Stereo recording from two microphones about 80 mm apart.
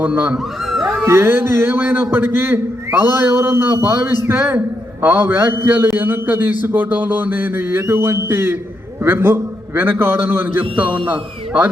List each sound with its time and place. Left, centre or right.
0.0 s a man's voice: centre
0.7 s cat: centre
1.0 s music: right
1.8 s a man's voice: right